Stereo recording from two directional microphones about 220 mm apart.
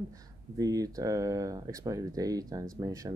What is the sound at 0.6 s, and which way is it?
Speech, 15° right (ahead or behind).